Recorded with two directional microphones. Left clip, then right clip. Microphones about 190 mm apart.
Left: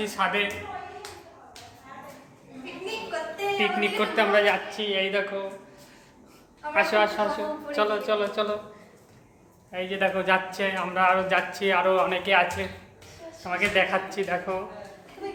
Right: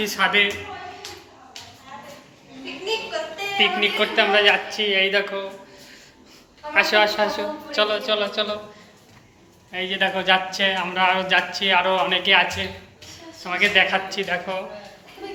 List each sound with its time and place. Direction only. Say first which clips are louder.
0.0 s a woman's voice: right 6 dB; 5° right (ahead or behind)
3.6 s a man's voice: right 7 dB; 5° left (ahead or behind)
4.8 s speech: right 6 dB; 10° right (ahead or behind)
6.7 s a woman's voice: right 5 dB; centre (ahead or behind)
7.7 s a man's voice: right 4 dB; 10° left (ahead or behind)
9.7 s a man's voice: right 3 dB; 5° left (ahead or behind)
15.2 s a sound: right 1 dB; 10° left (ahead or behind)